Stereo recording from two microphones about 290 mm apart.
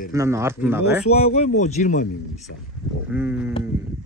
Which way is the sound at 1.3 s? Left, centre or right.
Left.